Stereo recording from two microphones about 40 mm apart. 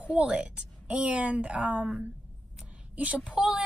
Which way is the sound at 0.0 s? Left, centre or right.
Right.